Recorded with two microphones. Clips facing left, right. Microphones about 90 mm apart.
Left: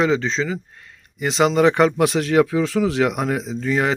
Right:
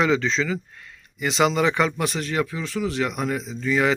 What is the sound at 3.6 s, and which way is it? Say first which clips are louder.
Speech: even; 45° left (ahead or behind).